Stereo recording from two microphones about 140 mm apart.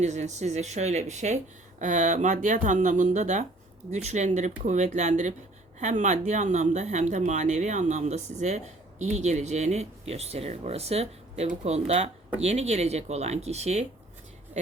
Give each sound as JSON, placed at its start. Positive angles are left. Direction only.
{"t": 0.0, "sound": "speech", "side_deg": -55}